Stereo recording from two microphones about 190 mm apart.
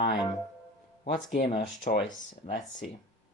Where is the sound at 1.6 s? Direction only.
60° left (ahead or behind).